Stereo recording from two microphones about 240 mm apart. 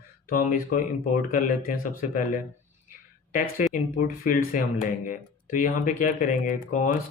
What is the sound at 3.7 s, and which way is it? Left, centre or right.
Speech, left.